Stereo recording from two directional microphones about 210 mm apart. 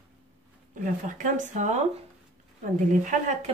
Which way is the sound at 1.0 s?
40° right (ahead or behind).